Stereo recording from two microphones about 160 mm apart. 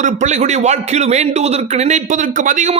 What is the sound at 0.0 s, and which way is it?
A man's voice, 50° right (ahead or behind).